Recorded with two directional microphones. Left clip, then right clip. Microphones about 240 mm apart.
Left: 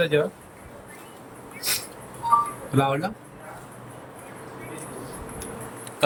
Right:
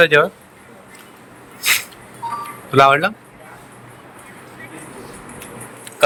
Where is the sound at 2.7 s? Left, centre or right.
Right.